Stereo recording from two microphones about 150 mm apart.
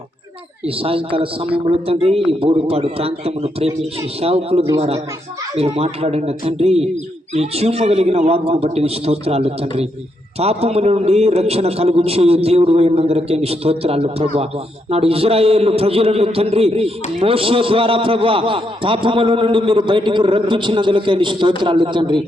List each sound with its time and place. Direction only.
0.6 s a man's voice: 40° right (ahead or behind)